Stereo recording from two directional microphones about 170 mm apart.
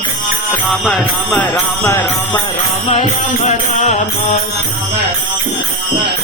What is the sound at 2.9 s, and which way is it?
Music, 40° left (ahead or behind).